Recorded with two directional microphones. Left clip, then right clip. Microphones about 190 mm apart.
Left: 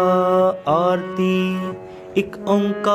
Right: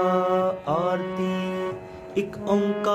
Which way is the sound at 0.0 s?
40° left (ahead or behind).